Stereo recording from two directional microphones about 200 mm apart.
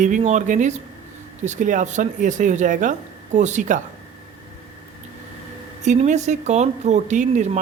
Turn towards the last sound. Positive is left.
turn(degrees=-35)  # may be behind; listen again after turning